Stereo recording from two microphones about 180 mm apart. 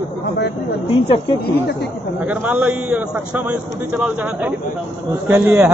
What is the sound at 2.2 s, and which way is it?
A man's voice, 10° right (ahead or behind).